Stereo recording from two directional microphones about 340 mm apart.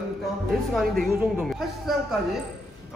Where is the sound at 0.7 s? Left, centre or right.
Centre.